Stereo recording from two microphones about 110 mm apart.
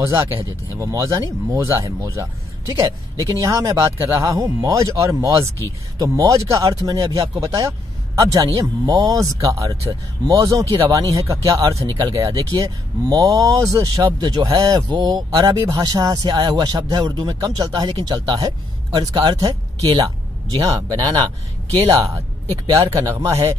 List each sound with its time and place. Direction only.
0.0 s a man's voice: 25° right (ahead or behind)
20.6 s a man's voice: 35° right (ahead or behind)